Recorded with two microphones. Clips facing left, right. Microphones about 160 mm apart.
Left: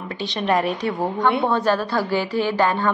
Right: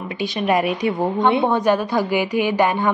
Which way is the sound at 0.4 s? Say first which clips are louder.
Right 2 dB; 10° right (ahead or behind).